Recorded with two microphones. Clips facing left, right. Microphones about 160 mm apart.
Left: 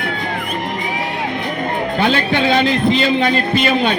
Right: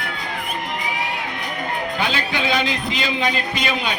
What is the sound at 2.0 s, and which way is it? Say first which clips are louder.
Speech: left 9 dB; 55° left (ahead or behind).